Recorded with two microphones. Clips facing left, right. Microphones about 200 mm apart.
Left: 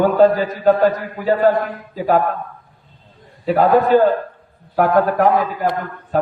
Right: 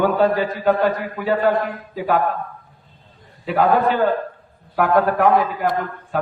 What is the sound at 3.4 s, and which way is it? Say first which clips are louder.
A man's voice: left 3 dB; 40° left (ahead or behind).